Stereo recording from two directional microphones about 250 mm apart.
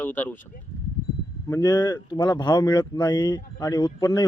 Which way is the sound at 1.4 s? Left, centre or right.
Centre.